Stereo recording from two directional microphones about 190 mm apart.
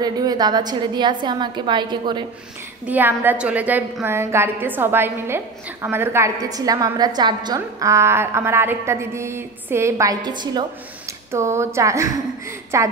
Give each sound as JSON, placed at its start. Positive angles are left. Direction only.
{"t": 0.0, "sound": "a woman's voice", "side_deg": -20}
{"t": 2.9, "sound": "a woman's voice", "side_deg": -10}